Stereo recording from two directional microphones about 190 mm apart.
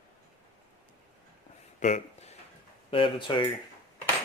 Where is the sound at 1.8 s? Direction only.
40° left (ahead or behind).